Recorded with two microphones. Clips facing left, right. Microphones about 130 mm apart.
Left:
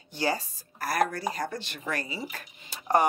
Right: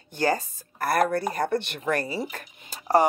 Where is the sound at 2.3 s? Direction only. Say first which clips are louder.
Right 3 dB; 45° right (ahead or behind).